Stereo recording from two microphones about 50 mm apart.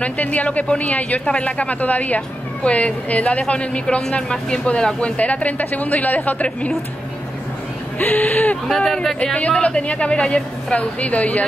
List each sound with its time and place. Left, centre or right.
0.0 s a woman's voice: left
5.1 s speech: left
8.0 s speech: left
8.6 s speech: centre
9.2 s a woman's voice: left